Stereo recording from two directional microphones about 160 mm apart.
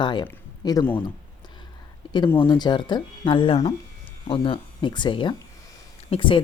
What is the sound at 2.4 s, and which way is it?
Speech, 25° left (ahead or behind).